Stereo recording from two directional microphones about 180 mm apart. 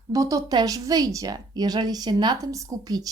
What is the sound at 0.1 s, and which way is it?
Speech, 20° right (ahead or behind).